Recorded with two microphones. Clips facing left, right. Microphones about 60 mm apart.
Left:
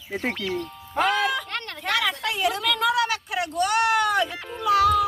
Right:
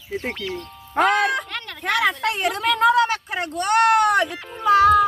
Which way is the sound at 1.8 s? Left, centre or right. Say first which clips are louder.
Right 5 dB; right.